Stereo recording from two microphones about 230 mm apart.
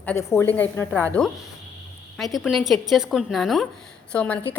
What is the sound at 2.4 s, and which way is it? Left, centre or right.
A woman's voice, centre.